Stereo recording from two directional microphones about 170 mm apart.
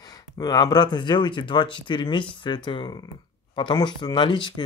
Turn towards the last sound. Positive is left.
turn(degrees=30)  # may be behind; listen again after turning